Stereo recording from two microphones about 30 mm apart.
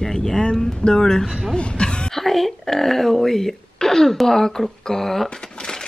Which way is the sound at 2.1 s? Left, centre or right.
Centre.